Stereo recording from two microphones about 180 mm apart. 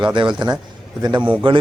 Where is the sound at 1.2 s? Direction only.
10° right (ahead or behind).